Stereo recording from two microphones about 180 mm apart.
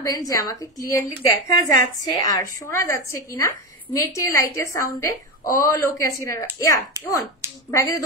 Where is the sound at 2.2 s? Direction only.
20° left (ahead or behind).